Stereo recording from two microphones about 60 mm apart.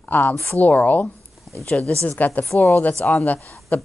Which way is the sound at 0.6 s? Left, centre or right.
Left.